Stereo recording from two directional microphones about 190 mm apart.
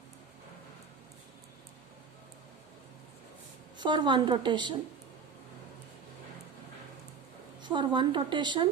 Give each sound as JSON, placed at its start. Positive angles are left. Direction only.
{"t": 3.8, "sound": "a woman's voice", "side_deg": -25}
{"t": 7.6, "sound": "a woman's voice", "side_deg": -25}